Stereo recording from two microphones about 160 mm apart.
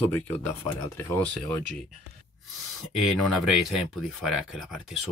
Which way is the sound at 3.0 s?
Centre (ahead or behind).